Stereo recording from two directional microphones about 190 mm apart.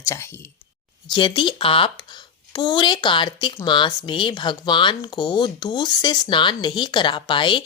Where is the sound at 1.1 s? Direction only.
25° left (ahead or behind).